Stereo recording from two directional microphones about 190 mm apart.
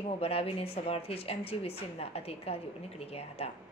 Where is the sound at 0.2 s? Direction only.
30° left (ahead or behind).